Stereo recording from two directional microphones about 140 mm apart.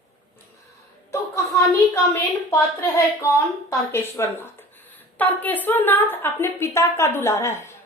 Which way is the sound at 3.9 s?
15° left (ahead or behind).